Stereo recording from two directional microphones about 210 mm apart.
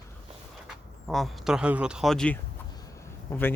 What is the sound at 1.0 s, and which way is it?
Speech, centre (ahead or behind).